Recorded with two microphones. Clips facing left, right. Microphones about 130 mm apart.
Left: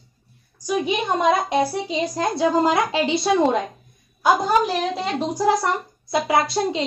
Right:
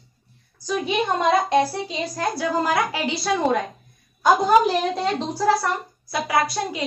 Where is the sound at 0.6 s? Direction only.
15° left (ahead or behind).